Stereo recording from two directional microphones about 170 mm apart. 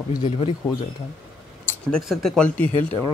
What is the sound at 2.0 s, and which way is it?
Speech, centre (ahead or behind).